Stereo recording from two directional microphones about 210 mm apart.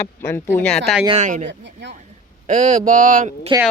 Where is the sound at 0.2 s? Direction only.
10° left (ahead or behind).